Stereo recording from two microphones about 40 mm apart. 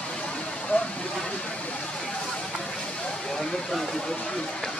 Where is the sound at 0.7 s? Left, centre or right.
Left.